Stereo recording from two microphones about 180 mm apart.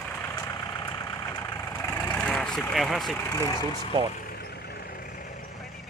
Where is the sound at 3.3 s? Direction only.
15° left (ahead or behind).